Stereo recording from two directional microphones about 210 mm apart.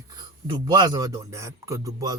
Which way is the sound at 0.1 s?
20° right (ahead or behind).